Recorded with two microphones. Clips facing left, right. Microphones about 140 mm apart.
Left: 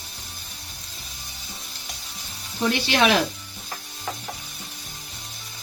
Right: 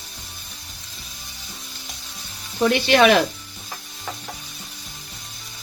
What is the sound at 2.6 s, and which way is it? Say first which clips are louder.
Speech: right 5 dB; 55° right (ahead or behind).